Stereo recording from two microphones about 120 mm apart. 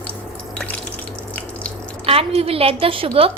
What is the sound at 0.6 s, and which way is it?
Water, 15° left (ahead or behind).